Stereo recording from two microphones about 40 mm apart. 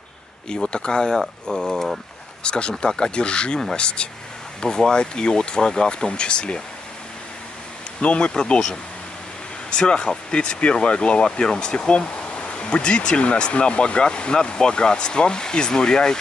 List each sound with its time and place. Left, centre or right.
0.5 s speech: left
2.4 s speech: left
8.0 s speech: left